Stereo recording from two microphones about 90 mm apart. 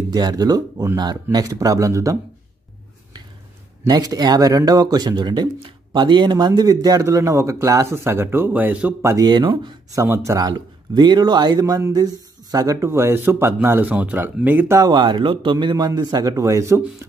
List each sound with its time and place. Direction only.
0.1 s speech: 50° right (ahead or behind)
3.8 s speech: 45° right (ahead or behind); by 8.9 s 20° right (ahead or behind)
9.2 s speech: 60° right (ahead or behind)
10.0 s speech: 25° right (ahead or behind)
10.3 s speech: 50° right (ahead or behind); by 14.8 s 20° right (ahead or behind)
14.8 s speech: 50° right (ahead or behind); by 16.8 s 35° right (ahead or behind)